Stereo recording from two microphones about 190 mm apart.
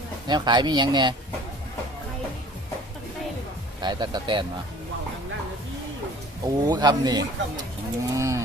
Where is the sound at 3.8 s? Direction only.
20° right (ahead or behind).